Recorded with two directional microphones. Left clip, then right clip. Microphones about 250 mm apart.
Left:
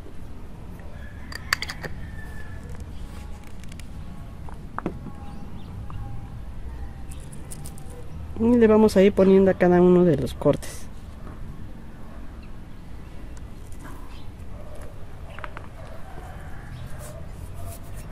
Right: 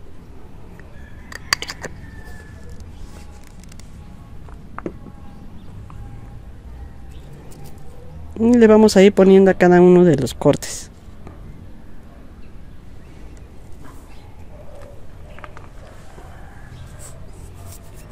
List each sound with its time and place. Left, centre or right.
8.4 s speech: right